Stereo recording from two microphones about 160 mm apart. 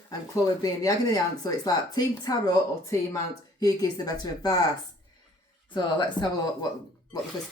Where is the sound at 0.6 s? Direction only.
25° left (ahead or behind).